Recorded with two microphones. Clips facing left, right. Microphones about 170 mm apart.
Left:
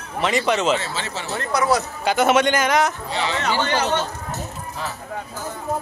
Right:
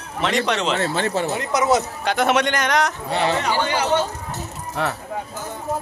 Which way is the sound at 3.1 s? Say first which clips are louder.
Right 4 dB; 55° right (ahead or behind).